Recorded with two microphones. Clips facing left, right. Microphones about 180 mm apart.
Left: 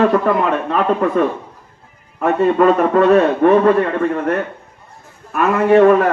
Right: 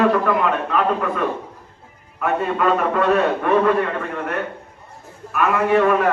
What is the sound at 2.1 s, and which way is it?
A man's voice, 40° left (ahead or behind).